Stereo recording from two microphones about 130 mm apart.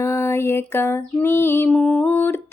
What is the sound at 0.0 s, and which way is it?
Female singing, 20° left (ahead or behind).